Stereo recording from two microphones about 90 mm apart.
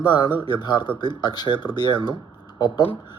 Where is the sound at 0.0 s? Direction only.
50° left (ahead or behind).